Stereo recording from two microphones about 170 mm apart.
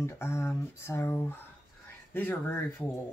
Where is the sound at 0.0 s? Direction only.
15° left (ahead or behind).